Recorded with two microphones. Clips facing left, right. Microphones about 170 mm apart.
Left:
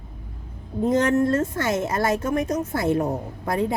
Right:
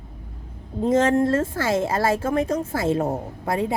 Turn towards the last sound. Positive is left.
turn(degrees=-25)  # may be behind; listen again after turning